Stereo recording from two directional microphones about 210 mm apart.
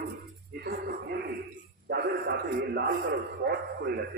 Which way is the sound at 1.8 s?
50° right (ahead or behind).